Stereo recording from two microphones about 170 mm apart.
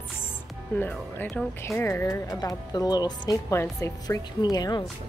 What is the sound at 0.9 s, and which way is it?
Speech, 10° left (ahead or behind).